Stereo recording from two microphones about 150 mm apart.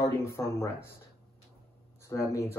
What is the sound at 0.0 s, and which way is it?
Speech, 20° left (ahead or behind).